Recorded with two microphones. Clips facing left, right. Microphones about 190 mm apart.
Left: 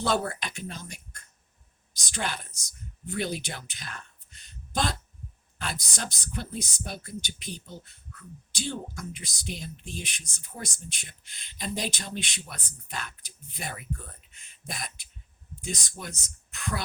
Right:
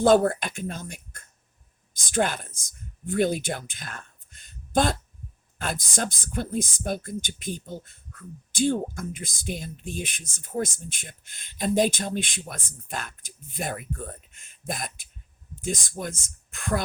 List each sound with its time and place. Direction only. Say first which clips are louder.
0.0 s speech: right 9 dB; 50° right (ahead or behind)